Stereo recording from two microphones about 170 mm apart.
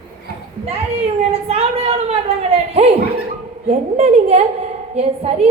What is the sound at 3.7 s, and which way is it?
A woman's voice, 35° right (ahead or behind).